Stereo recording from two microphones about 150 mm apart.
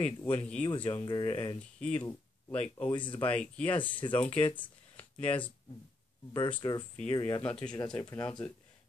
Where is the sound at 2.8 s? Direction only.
30° left (ahead or behind).